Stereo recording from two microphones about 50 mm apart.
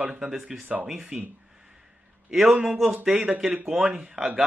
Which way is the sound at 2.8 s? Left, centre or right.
Centre.